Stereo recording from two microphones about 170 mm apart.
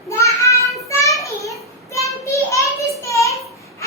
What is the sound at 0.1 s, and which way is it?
Child singing, 15° left (ahead or behind).